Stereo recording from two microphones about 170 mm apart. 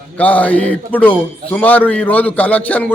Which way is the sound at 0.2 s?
10° left (ahead or behind).